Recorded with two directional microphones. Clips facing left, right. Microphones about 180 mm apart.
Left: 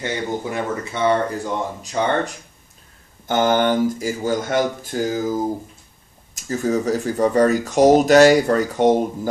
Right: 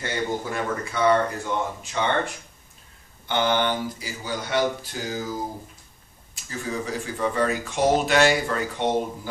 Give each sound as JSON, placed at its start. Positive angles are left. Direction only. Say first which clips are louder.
{"t": 0.0, "sound": "speech", "louder": "left 3 dB", "side_deg": 20}
{"t": 1.8, "sound": "speech", "louder": "left 4 dB", "side_deg": 40}